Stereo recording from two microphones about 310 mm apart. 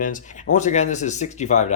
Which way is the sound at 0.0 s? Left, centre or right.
Left.